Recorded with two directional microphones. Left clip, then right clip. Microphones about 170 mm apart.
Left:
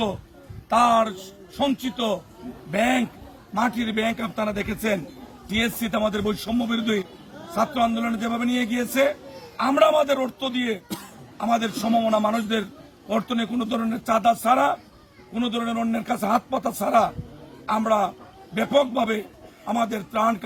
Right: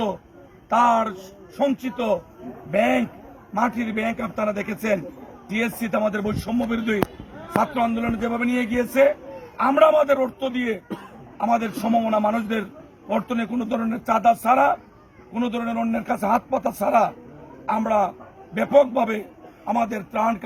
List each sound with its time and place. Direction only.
0.7 s speech: 25° left (ahead or behind)